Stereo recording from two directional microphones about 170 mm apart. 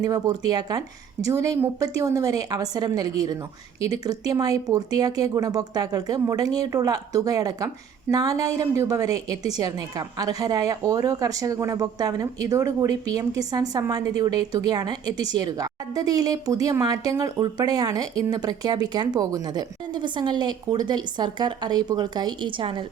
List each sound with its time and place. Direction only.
0.0 s speech: 20° right (ahead or behind)